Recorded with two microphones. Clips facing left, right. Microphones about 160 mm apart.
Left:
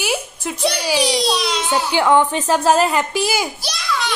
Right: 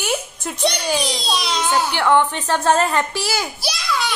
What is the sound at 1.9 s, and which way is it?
A woman's voice, 10° left (ahead or behind).